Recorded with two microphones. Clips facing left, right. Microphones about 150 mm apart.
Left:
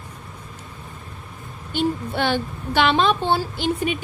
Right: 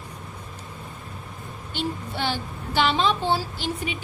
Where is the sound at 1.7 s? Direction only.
55° left (ahead or behind).